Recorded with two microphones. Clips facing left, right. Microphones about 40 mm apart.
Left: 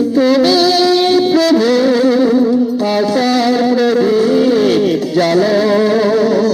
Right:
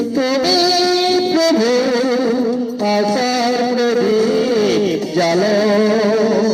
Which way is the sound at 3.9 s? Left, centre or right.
Centre.